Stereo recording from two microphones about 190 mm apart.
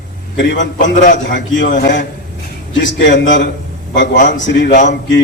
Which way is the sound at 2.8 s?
70° left (ahead or behind).